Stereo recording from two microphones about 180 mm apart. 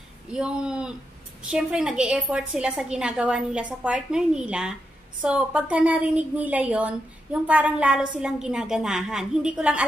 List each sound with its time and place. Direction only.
0.3 s a woman's voice: 5° right (ahead or behind)